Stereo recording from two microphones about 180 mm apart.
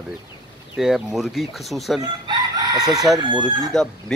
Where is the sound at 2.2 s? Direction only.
20° right (ahead or behind).